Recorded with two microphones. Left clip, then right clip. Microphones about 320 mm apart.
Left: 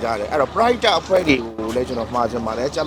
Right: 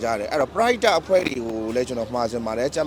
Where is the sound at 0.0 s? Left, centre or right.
Right.